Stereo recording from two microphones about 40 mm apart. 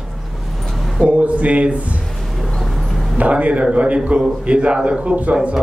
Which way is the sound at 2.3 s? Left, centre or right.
Centre.